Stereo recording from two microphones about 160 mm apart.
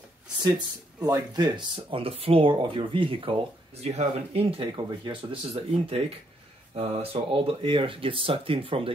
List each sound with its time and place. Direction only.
0.9 s speech: 25° right (ahead or behind)